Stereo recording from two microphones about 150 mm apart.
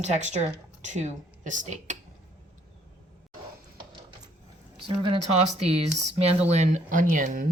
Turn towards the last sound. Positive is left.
turn(degrees=-60)  # may be behind; listen again after turning